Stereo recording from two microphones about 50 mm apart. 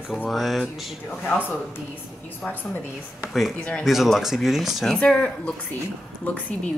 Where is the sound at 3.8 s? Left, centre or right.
Centre.